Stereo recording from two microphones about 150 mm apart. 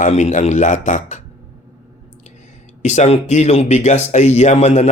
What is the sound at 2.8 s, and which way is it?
Speech, 50° left (ahead or behind).